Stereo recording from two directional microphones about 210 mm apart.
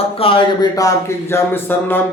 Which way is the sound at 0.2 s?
25° left (ahead or behind).